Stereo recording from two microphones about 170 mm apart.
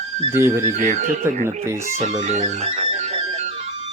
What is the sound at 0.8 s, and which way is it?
Speech, 45° right (ahead or behind).